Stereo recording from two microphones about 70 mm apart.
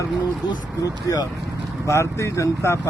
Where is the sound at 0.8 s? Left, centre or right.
Left.